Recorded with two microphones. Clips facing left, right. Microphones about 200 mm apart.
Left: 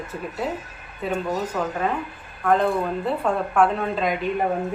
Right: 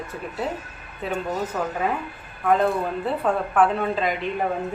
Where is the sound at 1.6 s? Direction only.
5° right (ahead or behind).